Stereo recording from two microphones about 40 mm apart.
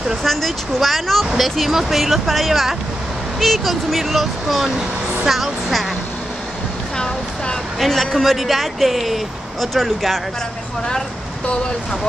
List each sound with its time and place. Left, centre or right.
0.2 s speech: centre
7.8 s speech: centre